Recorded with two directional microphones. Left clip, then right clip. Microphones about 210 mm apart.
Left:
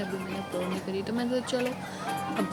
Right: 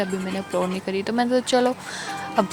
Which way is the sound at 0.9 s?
35° right (ahead or behind).